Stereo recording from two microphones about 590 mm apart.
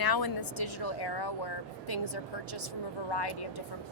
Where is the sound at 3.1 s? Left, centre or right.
Left.